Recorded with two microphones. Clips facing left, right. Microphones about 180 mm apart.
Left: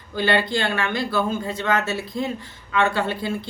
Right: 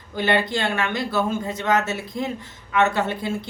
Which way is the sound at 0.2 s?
20° right (ahead or behind).